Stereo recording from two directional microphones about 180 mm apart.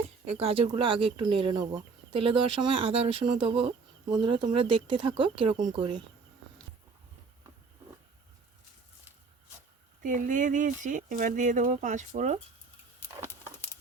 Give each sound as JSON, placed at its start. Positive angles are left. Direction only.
{"t": 0.3, "sound": "speech", "side_deg": -35}
{"t": 10.0, "sound": "speech", "side_deg": -45}
{"t": 13.1, "sound": "a sound", "side_deg": -15}